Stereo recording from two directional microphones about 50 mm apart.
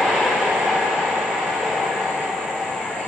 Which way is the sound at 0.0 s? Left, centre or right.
Centre.